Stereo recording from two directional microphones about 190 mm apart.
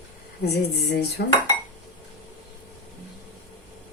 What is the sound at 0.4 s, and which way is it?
Speech, 60° left (ahead or behind).